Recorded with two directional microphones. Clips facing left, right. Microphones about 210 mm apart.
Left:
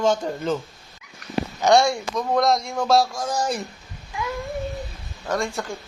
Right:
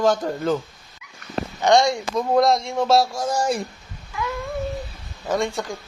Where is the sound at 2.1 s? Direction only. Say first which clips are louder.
Right 4 dB; 5° right (ahead or behind).